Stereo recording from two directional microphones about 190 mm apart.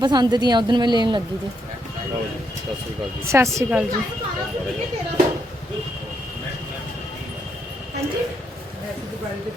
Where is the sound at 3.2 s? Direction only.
15° right (ahead or behind).